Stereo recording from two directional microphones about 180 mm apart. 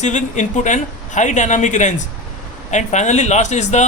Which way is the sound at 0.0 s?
40° left (ahead or behind).